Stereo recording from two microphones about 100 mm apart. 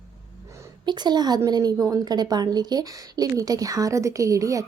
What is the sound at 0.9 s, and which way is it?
A woman's voice, 45° right (ahead or behind).